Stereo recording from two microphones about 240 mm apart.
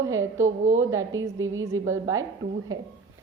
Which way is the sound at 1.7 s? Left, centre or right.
Centre.